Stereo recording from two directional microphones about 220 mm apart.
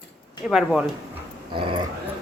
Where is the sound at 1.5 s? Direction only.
25° right (ahead or behind).